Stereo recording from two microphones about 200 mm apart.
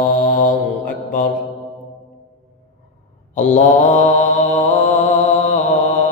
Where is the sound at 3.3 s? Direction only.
35° left (ahead or behind).